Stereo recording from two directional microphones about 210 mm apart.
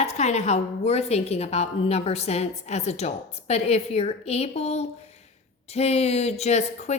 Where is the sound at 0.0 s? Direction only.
35° left (ahead or behind).